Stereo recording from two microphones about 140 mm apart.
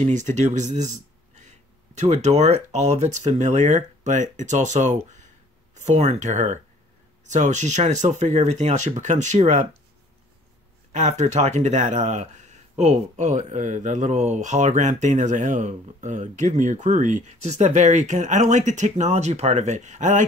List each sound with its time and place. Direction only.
0.0 s speech: 60° right (ahead or behind)
10.9 s speech: 60° right (ahead or behind)